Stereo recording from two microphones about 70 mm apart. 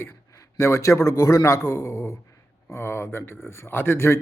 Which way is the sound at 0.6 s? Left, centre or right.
Left.